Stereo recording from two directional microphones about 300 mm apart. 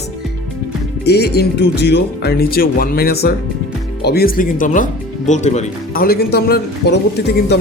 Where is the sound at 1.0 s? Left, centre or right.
Left.